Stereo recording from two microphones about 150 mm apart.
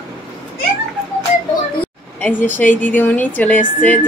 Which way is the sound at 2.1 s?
10° left (ahead or behind).